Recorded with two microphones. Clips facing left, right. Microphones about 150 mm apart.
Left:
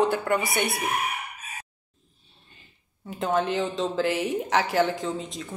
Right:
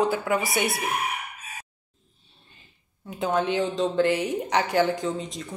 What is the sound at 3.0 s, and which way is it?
A woman's voice, centre (ahead or behind).